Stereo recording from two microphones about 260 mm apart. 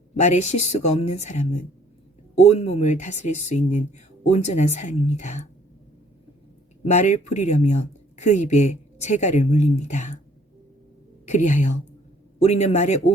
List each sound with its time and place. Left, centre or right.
0.2 s speech: left
6.8 s speech: left
11.3 s speech: left